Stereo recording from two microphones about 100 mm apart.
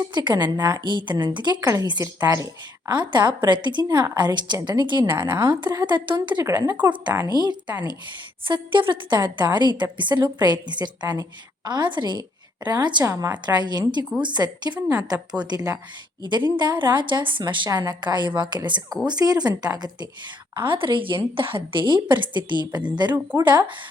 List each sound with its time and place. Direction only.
0.1 s a woman's voice: 50° right (ahead or behind)
1.6 s a woman's voice: 35° right (ahead or behind)
2.9 s a woman's voice: 50° right (ahead or behind)
6.4 s speech: 30° right (ahead or behind)
7.3 s a woman's voice: 40° right (ahead or behind)
8.4 s a woman's voice: 55° right (ahead or behind)
13.1 s a woman's voice: 30° right (ahead or behind)
13.3 s a woman's voice: 45° right (ahead or behind)
17.7 s a woman's voice: 40° right (ahead or behind)
20.6 s a woman's voice: 55° right (ahead or behind)
23.1 s speech: 20° right (ahead or behind)
23.5 s a woman's voice: 50° right (ahead or behind)